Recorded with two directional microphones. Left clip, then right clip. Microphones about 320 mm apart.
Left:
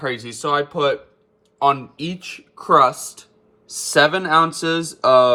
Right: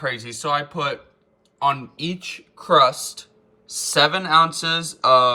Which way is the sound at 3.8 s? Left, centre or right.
Centre.